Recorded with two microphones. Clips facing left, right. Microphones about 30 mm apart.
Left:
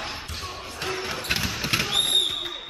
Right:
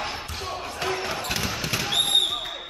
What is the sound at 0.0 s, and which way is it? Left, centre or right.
Basketball bounce, centre.